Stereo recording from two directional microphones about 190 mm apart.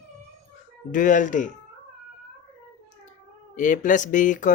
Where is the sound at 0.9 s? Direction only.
45° left (ahead or behind).